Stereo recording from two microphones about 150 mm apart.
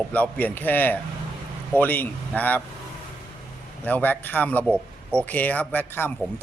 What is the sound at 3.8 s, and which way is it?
Speech, 10° left (ahead or behind).